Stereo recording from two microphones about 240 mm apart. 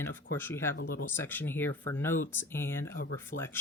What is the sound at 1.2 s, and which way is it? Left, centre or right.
Speech, centre.